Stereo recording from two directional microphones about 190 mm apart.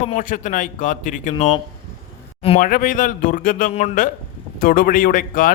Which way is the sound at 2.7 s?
45° left (ahead or behind).